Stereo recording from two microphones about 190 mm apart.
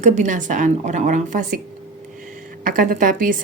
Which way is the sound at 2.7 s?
45° right (ahead or behind).